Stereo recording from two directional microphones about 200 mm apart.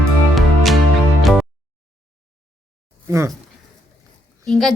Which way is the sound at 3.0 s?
15° right (ahead or behind).